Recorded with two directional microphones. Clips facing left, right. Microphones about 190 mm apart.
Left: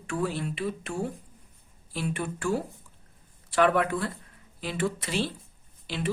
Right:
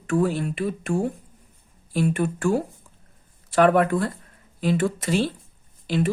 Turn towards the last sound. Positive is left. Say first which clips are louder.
# right 10 dB
turn(degrees=-45)  # may be behind; listen again after turning